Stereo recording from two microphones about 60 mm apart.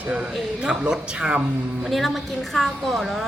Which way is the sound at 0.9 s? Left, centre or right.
Centre.